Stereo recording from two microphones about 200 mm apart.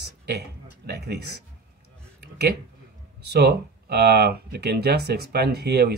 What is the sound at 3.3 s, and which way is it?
Speech, 55° right (ahead or behind).